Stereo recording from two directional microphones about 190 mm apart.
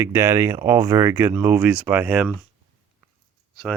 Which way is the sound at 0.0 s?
15° right (ahead or behind).